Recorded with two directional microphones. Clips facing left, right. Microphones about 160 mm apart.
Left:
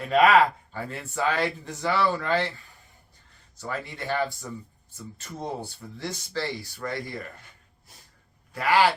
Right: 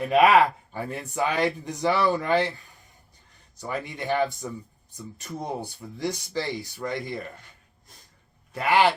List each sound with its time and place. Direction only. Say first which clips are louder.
0.0 s speech: right 1 dB; 15° right (ahead or behind)
3.6 s speech: right 2 dB; 15° right (ahead or behind)
8.5 s speech: even; 20° right (ahead or behind)